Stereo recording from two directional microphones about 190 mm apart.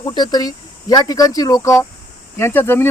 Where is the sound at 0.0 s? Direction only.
20° left (ahead or behind).